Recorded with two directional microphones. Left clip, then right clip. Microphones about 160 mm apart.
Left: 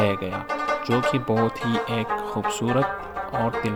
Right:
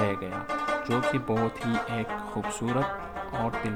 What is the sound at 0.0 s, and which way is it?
Speech, 25° left (ahead or behind).